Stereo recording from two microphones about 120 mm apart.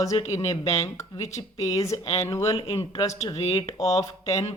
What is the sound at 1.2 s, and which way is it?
Speech, 25° left (ahead or behind).